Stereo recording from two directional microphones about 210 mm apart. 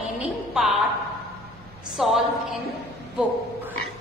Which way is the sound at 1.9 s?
Centre (ahead or behind).